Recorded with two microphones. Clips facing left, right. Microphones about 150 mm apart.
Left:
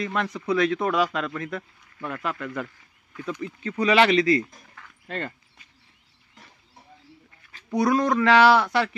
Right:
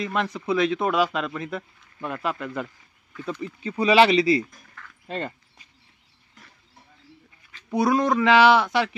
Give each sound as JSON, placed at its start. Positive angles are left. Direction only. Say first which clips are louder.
{"t": 0.0, "sound": "speech", "louder": "right 1 dB", "side_deg": -20}
{"t": 2.4, "sound": "speech", "louder": "right 1 dB", "side_deg": -10}
{"t": 3.8, "sound": "speech", "louder": "right 2 dB", "side_deg": -25}
{"t": 4.2, "sound": "speech", "louder": "even", "side_deg": -10}
{"t": 5.0, "sound": "dog", "louder": "right 2 dB", "side_deg": -20}
{"t": 7.7, "sound": "speech", "louder": "even", "side_deg": -5}
{"t": 8.2, "sound": "speech", "louder": "even", "side_deg": -20}